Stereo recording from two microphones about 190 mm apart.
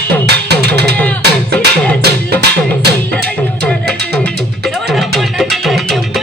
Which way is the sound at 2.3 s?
60° right (ahead or behind).